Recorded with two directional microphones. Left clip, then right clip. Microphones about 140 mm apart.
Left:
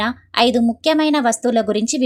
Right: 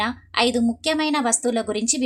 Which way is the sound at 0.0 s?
40° left (ahead or behind).